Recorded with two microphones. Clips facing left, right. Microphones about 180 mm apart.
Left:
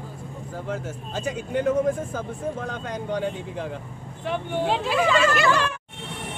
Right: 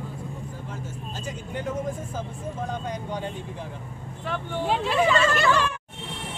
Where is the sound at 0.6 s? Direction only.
85° left.